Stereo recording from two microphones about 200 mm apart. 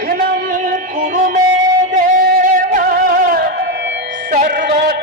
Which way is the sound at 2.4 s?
40° right (ahead or behind).